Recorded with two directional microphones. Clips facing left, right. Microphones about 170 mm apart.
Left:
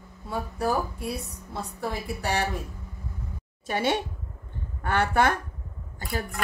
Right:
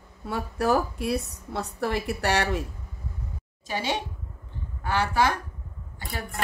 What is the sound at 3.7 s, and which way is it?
A woman's voice, 55° left (ahead or behind).